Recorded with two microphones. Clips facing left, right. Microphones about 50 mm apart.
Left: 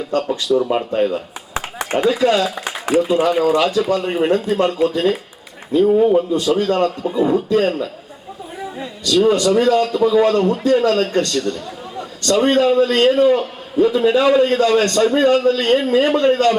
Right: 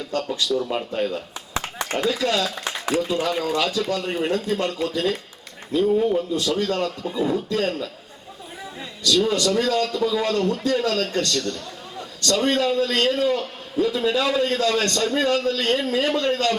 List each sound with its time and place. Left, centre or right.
0.1 s a man's voice: left
9.0 s a man's voice: left